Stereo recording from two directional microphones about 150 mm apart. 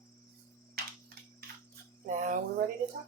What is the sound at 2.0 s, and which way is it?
Speech, 60° right (ahead or behind).